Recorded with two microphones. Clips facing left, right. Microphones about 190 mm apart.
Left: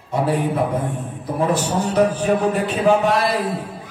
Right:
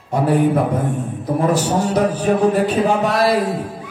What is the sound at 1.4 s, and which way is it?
A man's voice, 40° right (ahead or behind).